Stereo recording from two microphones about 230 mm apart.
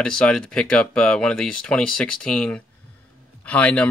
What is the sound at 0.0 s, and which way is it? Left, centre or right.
Speech, centre.